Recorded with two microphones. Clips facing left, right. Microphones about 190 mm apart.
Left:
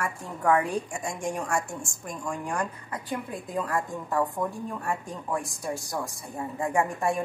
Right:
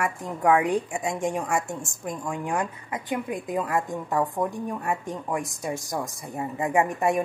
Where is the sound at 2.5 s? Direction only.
20° right (ahead or behind).